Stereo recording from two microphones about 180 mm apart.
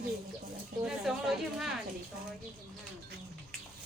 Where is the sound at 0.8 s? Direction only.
Centre (ahead or behind).